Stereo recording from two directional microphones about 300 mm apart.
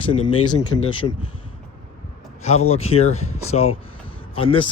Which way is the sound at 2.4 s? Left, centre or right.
Left.